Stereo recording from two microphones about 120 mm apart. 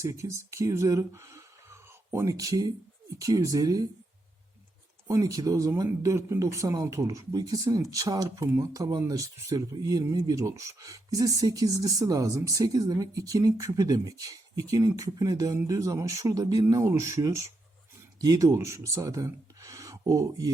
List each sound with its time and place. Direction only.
0.0 s speech: 25° right (ahead or behind)
5.0 s speech: 30° right (ahead or behind)